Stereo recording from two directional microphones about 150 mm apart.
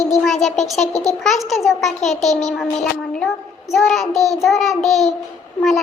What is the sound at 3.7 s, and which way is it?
Child singing, centre (ahead or behind).